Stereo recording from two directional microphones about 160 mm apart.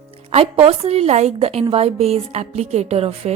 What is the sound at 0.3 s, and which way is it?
A woman's voice, 40° right (ahead or behind).